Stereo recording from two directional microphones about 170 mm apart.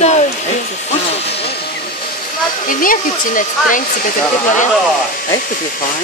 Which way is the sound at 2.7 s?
55° left (ahead or behind).